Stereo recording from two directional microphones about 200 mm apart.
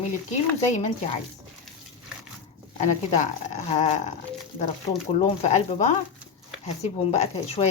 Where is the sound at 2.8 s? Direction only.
35° left (ahead or behind).